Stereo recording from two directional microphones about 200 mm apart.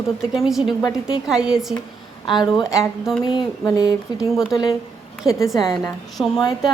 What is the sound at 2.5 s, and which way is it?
Speech, centre (ahead or behind).